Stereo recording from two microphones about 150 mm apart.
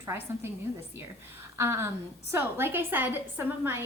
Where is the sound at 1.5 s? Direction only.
15° right (ahead or behind).